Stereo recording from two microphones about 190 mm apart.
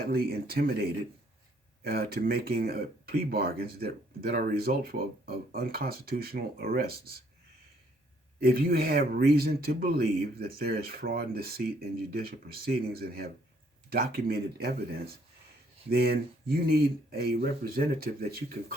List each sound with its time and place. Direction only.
0.1 s speech: 55° right (ahead or behind)
8.4 s speech: 50° right (ahead or behind)